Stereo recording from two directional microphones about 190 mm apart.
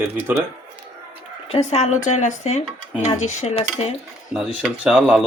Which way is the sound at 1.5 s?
35° left (ahead or behind).